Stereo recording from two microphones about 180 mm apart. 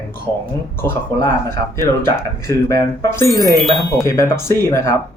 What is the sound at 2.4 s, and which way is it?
Speech, 15° left (ahead or behind).